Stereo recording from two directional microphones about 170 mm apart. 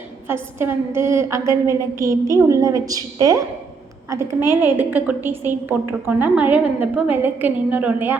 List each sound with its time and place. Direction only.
0.3 s a woman's voice: 15° right (ahead or behind)